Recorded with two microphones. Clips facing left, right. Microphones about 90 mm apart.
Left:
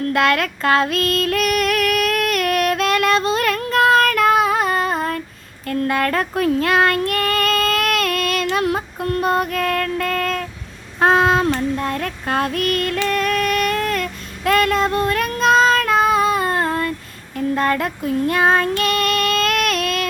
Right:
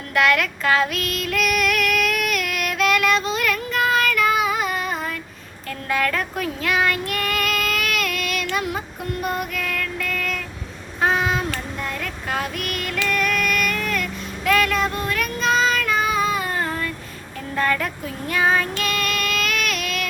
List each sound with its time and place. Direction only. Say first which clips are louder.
0.1 s female singing: even; 35° left (ahead or behind)
5.6 s child singing: left 4 dB; 45° left (ahead or behind)
8.6 s child singing: left 7 dB; 55° left (ahead or behind)